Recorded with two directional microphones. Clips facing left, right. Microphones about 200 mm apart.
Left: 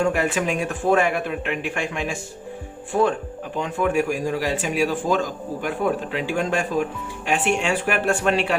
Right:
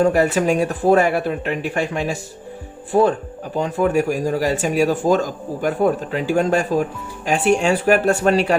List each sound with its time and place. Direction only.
0.0 s speech: 40° right (ahead or behind)